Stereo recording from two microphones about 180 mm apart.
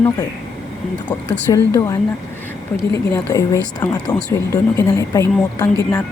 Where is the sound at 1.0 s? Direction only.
10° left (ahead or behind).